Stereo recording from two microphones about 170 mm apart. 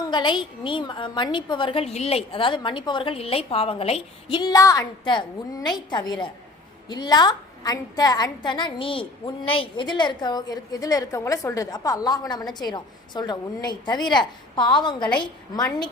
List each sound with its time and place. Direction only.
0.1 s a woman's voice: 30° left (ahead or behind)